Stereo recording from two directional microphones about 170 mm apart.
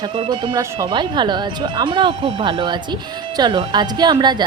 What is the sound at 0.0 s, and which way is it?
A woman's voice, 30° right (ahead or behind).